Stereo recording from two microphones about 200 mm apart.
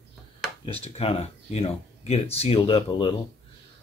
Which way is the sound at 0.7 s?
30° left (ahead or behind).